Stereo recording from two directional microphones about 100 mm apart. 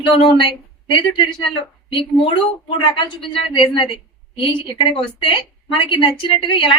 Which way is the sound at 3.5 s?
55° left (ahead or behind).